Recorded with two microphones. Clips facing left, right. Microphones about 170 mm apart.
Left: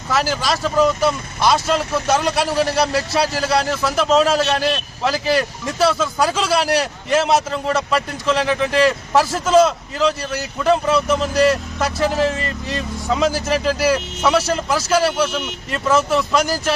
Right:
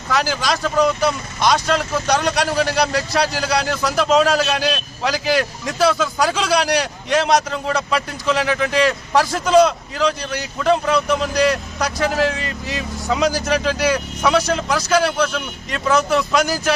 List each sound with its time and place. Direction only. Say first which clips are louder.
0.1 s speech: even; centre (ahead or behind)